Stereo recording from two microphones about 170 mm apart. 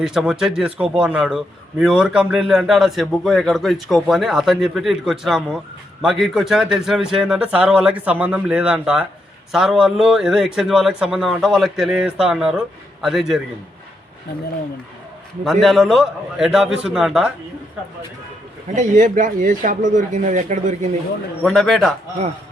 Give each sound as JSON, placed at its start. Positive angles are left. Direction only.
{"t": 0.0, "sound": "a man's voice", "side_deg": -5}
{"t": 15.6, "sound": "a man's voice", "side_deg": 0}
{"t": 18.7, "sound": "speech", "side_deg": -45}
{"t": 21.4, "sound": "a man's voice", "side_deg": 0}